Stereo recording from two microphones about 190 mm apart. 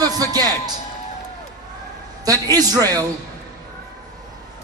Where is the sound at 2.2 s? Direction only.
20° right (ahead or behind).